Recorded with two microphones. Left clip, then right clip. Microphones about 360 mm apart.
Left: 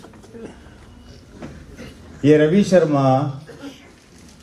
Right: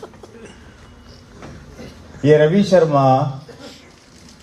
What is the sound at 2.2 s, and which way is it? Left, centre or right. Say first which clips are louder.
A man's voice: right 2 dB; right.